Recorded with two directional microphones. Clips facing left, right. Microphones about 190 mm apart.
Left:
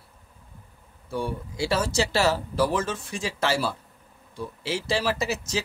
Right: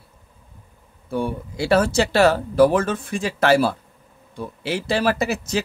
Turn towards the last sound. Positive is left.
turn(degrees=-60)  # may be behind; listen again after turning